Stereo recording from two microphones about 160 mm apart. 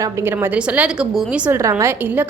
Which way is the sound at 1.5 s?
15° right (ahead or behind).